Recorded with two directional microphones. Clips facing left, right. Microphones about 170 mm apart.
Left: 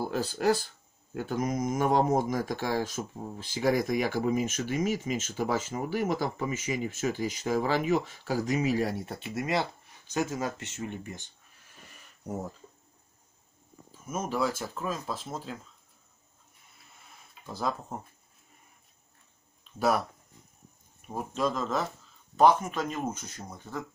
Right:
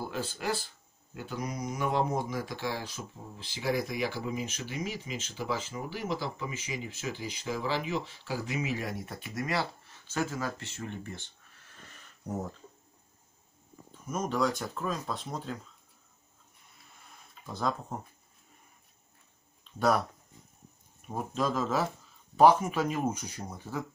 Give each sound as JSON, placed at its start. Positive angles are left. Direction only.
{"t": 0.0, "sound": "speech", "side_deg": 40}
{"t": 14.0, "sound": "speech", "side_deg": 5}
{"t": 17.3, "sound": "speech", "side_deg": 5}
{"t": 19.6, "sound": "speech", "side_deg": 5}
{"t": 21.1, "sound": "speech", "side_deg": 0}